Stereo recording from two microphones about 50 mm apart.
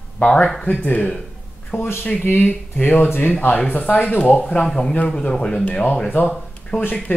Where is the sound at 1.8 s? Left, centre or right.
Left.